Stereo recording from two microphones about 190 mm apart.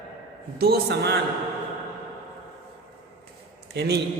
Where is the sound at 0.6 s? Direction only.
55° right (ahead or behind).